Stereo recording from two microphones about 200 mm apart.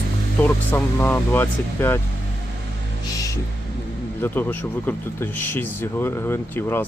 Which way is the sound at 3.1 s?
15° left (ahead or behind).